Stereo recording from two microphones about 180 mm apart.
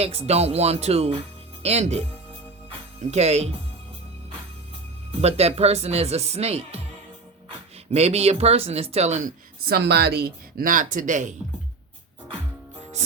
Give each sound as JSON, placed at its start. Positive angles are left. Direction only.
{"t": 0.0, "sound": "speech", "side_deg": -35}
{"t": 3.1, "sound": "speech", "side_deg": -35}
{"t": 5.2, "sound": "speech", "side_deg": -35}
{"t": 7.9, "sound": "speech", "side_deg": -35}
{"t": 9.6, "sound": "speech", "side_deg": -60}